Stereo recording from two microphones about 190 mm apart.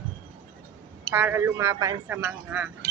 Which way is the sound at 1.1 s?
10° right (ahead or behind).